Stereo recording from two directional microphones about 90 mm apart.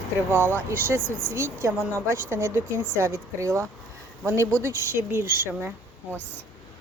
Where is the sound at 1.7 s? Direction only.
20° right (ahead or behind).